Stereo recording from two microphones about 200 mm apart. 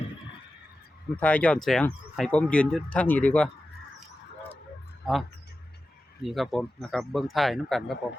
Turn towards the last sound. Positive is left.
turn(degrees=0)  # may be behind; listen again after turning